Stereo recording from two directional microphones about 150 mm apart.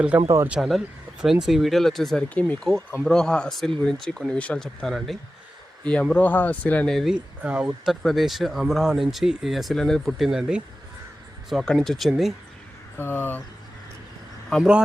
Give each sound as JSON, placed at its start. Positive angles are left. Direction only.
{"t": 0.3, "sound": "speech", "side_deg": -20}
{"t": 0.5, "sound": "speech", "side_deg": -5}
{"t": 7.9, "sound": "speech", "side_deg": 0}
{"t": 13.0, "sound": "speech", "side_deg": 15}
{"t": 14.5, "sound": "speech", "side_deg": -5}